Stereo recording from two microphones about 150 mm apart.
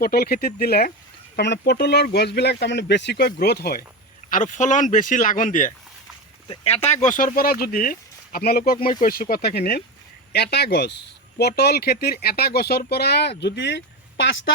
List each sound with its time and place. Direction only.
0.0 s speech: 90° left
4.3 s speech: 60° left (ahead or behind)
6.5 s speech: 45° left (ahead or behind); by 13.3 s 90° left